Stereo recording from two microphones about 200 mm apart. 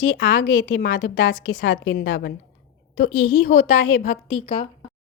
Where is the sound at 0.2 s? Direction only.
60° left (ahead or behind); by 2.0 s 75° left (ahead or behind).